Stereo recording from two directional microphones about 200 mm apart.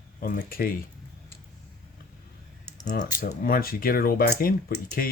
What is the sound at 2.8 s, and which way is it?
Speech, 40° left (ahead or behind).